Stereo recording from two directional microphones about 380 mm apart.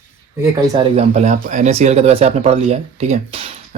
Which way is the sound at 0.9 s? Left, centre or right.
Centre.